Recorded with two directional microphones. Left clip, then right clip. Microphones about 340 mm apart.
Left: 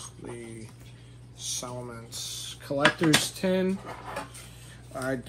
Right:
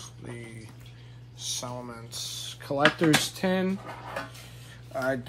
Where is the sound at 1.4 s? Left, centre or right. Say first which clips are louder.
Right 1 dB; right.